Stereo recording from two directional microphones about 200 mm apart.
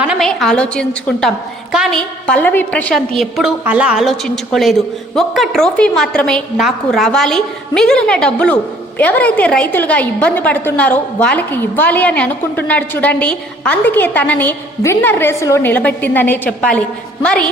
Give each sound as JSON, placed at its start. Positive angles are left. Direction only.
{"t": 0.1, "sound": "a woman's voice", "side_deg": 0}